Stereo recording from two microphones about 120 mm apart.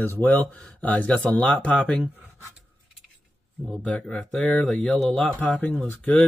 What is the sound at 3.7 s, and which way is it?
Speech, 10° left (ahead or behind).